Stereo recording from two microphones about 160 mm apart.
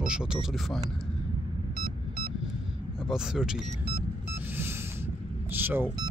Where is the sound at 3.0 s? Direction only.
5° right (ahead or behind).